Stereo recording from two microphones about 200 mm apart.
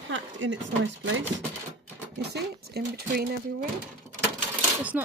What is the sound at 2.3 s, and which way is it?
Speech, 55° right (ahead or behind).